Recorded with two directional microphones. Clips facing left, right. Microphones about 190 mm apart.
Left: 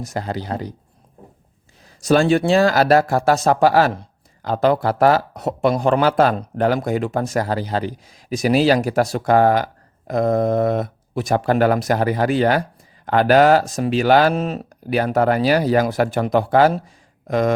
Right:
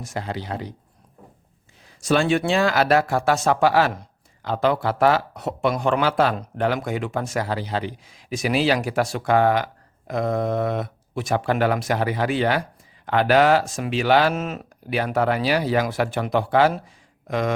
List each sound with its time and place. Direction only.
0.0 s a man's voice: 40° left (ahead or behind)
2.0 s a man's voice: 40° left (ahead or behind)